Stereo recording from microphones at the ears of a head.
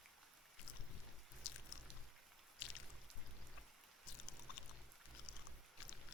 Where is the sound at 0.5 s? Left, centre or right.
Left.